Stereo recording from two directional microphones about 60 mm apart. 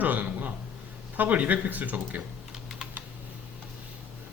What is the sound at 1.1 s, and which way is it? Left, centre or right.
Speech, right.